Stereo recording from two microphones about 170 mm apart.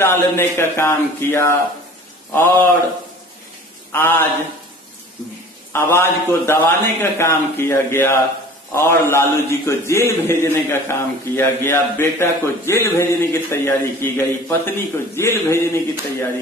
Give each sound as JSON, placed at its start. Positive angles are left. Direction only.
{"t": 0.0, "sound": "a man's voice", "side_deg": 15}
{"t": 3.9, "sound": "a man's voice", "side_deg": 15}
{"t": 5.7, "sound": "a man's voice", "side_deg": 15}